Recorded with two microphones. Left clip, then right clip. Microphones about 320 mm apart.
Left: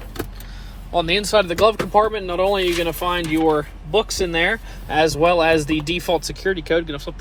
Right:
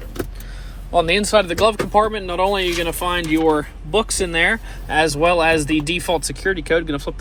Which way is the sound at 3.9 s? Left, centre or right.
Right.